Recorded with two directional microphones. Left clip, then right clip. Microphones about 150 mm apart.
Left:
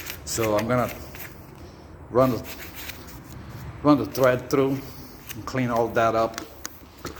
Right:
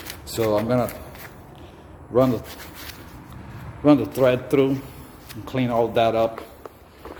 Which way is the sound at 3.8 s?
40° right (ahead or behind).